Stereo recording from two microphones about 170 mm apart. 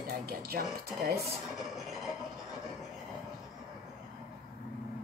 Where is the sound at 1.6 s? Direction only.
Centre (ahead or behind).